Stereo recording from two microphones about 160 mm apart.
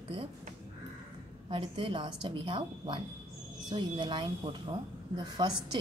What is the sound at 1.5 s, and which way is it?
A woman's voice, 30° right (ahead or behind).